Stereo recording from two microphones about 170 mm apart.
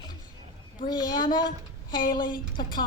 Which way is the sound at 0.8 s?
25° left (ahead or behind).